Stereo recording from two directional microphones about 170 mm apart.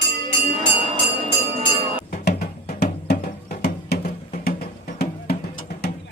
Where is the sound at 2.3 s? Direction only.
75° left (ahead or behind).